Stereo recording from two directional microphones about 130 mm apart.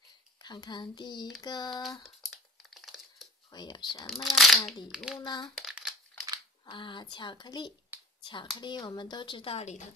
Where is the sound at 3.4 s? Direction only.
35° left (ahead or behind).